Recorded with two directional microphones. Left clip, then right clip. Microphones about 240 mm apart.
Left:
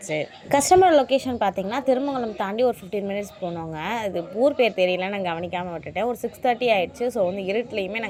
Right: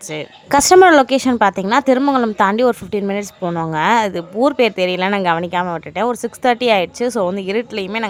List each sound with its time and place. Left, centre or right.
0.1 s a woman's voice: centre